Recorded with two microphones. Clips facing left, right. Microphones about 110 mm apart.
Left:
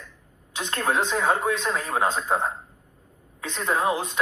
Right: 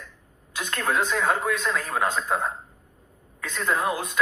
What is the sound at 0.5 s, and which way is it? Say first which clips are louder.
Speech: left 1 dB; 25° left (ahead or behind).